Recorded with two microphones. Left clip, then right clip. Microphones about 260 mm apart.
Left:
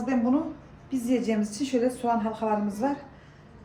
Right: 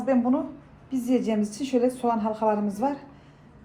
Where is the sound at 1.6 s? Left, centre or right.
Centre.